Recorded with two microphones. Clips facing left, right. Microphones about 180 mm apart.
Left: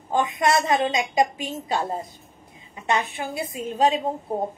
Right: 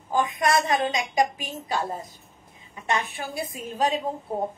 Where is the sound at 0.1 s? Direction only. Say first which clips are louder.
Left 2 dB; 25° left (ahead or behind).